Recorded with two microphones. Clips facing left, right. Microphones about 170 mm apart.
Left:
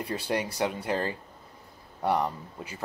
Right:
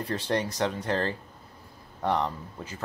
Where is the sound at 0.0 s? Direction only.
10° left (ahead or behind).